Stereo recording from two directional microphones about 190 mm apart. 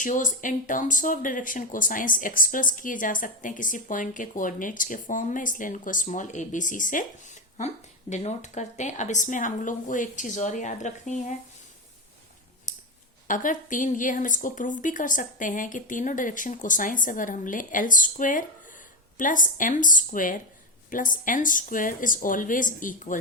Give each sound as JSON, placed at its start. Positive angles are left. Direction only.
{"t": 0.0, "sound": "speech", "side_deg": 40}
{"t": 8.1, "sound": "speech", "side_deg": 35}
{"t": 12.7, "sound": "a sound", "side_deg": 40}
{"t": 13.2, "sound": "speech", "side_deg": 45}